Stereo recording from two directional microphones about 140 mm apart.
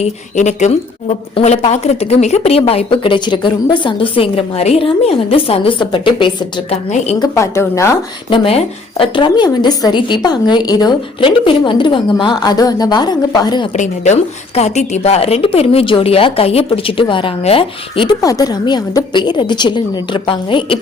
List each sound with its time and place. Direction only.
0.0 s a woman's voice: 55° left (ahead or behind); by 6.7 s 35° left (ahead or behind)
7.2 s a woman's voice: 20° left (ahead or behind)
8.3 s a woman's voice: 40° left (ahead or behind)
13.7 s a woman's voice: 60° left (ahead or behind); by 18.1 s 40° left (ahead or behind)
18.2 s a woman's voice: 25° left (ahead or behind)